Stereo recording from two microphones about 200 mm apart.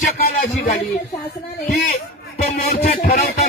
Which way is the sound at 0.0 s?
45° left (ahead or behind).